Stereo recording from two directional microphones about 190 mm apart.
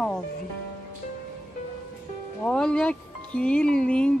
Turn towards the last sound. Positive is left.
turn(degrees=5)  # may be behind; listen again after turning